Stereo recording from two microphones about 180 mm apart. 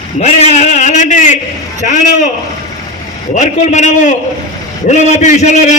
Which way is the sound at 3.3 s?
40° left (ahead or behind).